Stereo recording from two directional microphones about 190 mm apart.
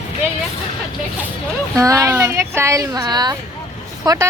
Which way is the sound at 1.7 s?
15° right (ahead or behind).